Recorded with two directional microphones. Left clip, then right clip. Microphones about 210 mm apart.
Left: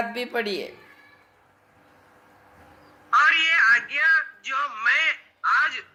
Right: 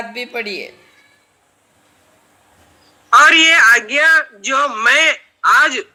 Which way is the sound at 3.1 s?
60° right (ahead or behind).